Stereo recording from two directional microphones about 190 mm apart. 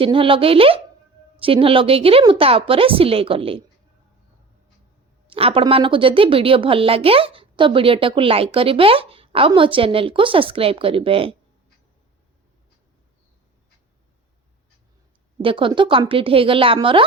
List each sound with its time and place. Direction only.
0.0 s speech: 25° right (ahead or behind)
5.3 s speech: 30° right (ahead or behind)
15.4 s speech: 25° right (ahead or behind)